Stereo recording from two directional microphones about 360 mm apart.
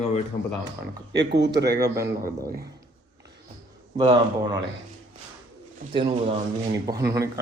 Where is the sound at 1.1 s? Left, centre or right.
Right.